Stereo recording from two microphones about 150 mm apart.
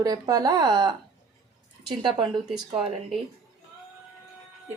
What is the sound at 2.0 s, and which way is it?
Speech, 35° right (ahead or behind).